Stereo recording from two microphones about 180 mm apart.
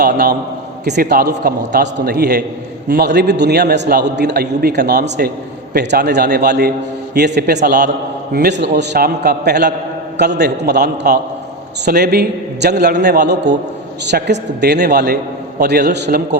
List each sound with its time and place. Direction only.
0.0 s a man's voice: 60° right (ahead or behind)